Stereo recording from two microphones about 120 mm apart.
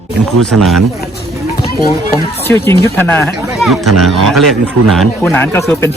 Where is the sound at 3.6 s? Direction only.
Centre (ahead or behind).